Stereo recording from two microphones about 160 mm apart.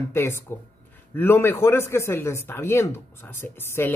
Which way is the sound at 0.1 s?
15° left (ahead or behind).